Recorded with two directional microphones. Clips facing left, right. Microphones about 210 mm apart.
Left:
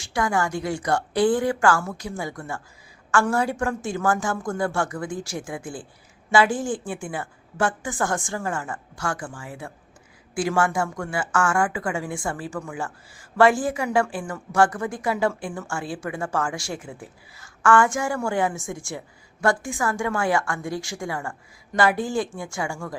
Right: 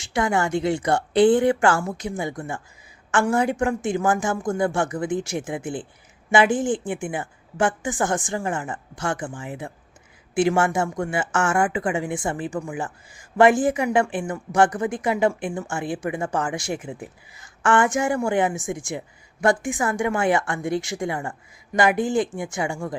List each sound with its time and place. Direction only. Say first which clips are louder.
0.0 s a woman's voice: right 2 dB; 20° right (ahead or behind)